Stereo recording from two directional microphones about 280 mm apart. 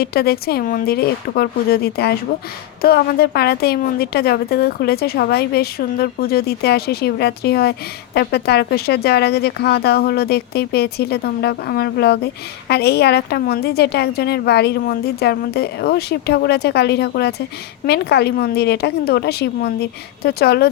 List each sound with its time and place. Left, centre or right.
0.0 s a woman's voice: left